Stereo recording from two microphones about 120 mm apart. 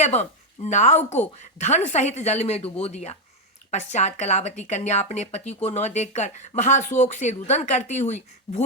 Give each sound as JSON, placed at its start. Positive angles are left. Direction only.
{"t": 0.0, "sound": "speech", "side_deg": 70}
{"t": 3.7, "sound": "speech", "side_deg": 75}
{"t": 6.6, "sound": "speech", "side_deg": 90}